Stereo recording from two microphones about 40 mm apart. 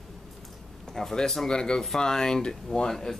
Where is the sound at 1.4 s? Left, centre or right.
Centre.